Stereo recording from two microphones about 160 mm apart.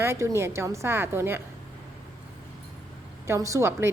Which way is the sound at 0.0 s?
15° right (ahead or behind).